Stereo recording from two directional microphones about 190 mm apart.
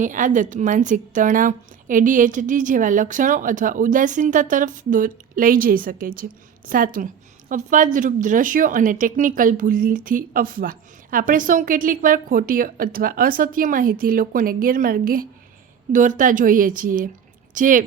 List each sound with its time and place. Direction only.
0.0 s a woman's voice: 45° right (ahead or behind)